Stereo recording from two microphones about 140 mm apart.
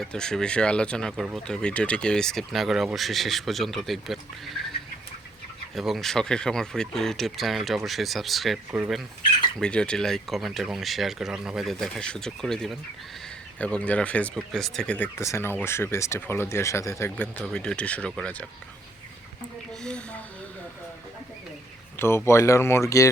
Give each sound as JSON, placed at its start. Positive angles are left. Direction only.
{"t": 0.0, "sound": "speech", "side_deg": 5}
{"t": 5.7, "sound": "speech", "side_deg": 0}
{"t": 17.2, "sound": "speech", "side_deg": 10}
{"t": 19.8, "sound": "speech", "side_deg": 5}
{"t": 21.9, "sound": "speech", "side_deg": 15}